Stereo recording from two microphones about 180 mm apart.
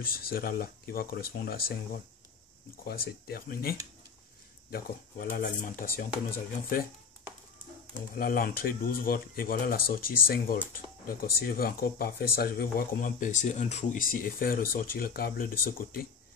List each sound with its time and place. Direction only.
0.0 s speech: 55° left (ahead or behind)
2.8 s speech: 60° left (ahead or behind)
7.9 s speech: 55° left (ahead or behind)